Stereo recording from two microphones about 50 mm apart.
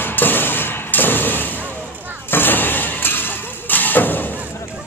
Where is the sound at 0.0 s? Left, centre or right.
Left.